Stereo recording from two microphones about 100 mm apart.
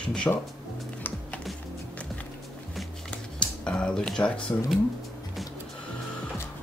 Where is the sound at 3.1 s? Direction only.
10° left (ahead or behind).